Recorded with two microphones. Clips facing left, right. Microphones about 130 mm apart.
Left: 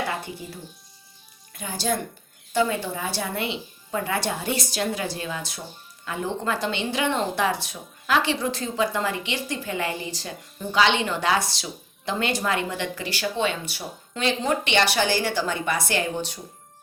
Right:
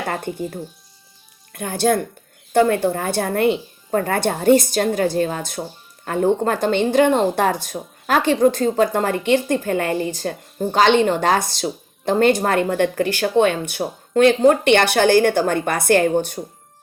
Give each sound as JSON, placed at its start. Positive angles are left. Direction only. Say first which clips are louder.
{"t": 0.0, "sound": "speech", "louder": "right 5 dB", "side_deg": -50}